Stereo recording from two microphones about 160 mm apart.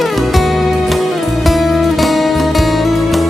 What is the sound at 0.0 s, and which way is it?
Music, centre (ahead or behind).